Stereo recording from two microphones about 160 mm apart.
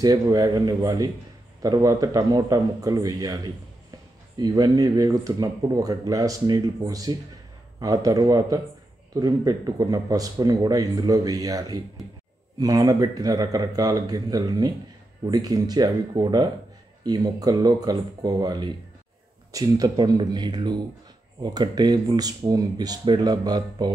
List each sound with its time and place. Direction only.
0.0 s a man's voice: 25° right (ahead or behind)